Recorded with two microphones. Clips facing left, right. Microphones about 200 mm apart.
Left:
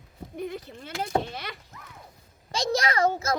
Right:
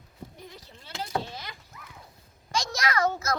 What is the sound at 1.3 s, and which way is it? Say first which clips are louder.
Rowboat: left 4 dB; 70° left (ahead or behind).